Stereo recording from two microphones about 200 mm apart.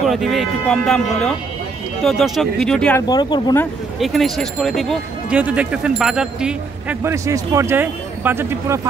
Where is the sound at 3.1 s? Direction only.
20° left (ahead or behind).